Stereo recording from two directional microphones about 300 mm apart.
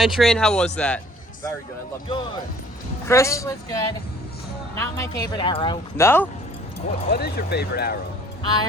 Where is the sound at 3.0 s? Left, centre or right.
Centre.